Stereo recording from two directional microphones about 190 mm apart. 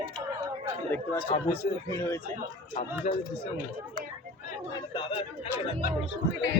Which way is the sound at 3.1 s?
35° left (ahead or behind).